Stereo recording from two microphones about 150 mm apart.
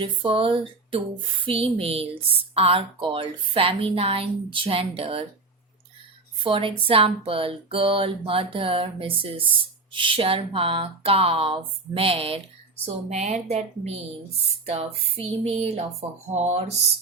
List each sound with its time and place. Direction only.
0.0 s speech: 35° right (ahead or behind)
6.4 s speech: 35° right (ahead or behind)
12.8 s a sound: 45° right (ahead or behind)